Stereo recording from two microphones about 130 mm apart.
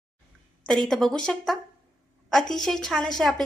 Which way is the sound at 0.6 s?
5° left (ahead or behind).